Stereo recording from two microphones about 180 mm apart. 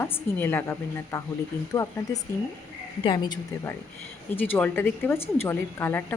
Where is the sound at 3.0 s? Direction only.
25° left (ahead or behind).